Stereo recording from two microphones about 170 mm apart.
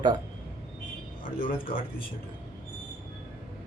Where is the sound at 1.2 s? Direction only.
55° left (ahead or behind).